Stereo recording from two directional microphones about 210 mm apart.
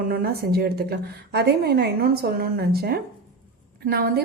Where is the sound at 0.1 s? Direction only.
45° right (ahead or behind).